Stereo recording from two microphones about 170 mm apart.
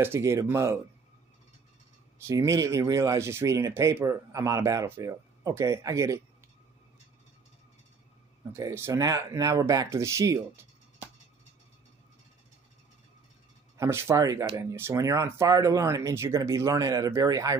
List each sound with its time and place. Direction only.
0.0 s speech: 15° right (ahead or behind)
2.2 s speech: 20° right (ahead or behind)
8.5 s speech: 15° right (ahead or behind)
13.7 s speech: 15° right (ahead or behind)